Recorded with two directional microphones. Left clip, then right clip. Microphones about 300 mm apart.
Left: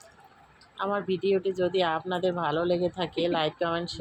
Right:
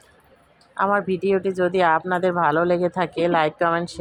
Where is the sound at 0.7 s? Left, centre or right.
Centre.